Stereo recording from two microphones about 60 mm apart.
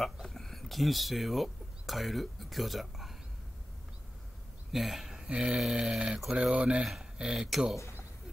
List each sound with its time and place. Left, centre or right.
0.0 s speech: centre
4.7 s speech: centre
5.3 s mantra: centre
6.8 s speech: centre